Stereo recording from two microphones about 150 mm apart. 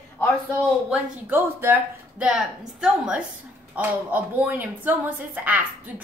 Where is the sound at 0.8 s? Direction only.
15° right (ahead or behind).